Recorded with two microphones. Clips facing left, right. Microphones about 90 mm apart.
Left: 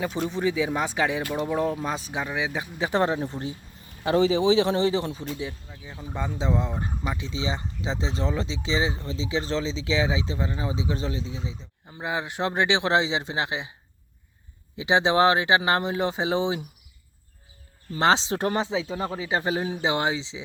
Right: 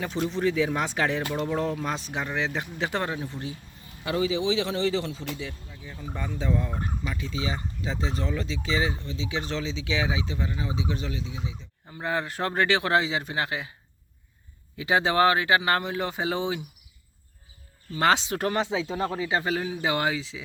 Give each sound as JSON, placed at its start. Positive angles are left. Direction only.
{"t": 0.3, "sound": "speech", "side_deg": 5}
{"t": 2.9, "sound": "speech", "side_deg": 20}
{"t": 11.9, "sound": "speech", "side_deg": 15}
{"t": 14.8, "sound": "speech", "side_deg": 20}
{"t": 17.9, "sound": "speech", "side_deg": 30}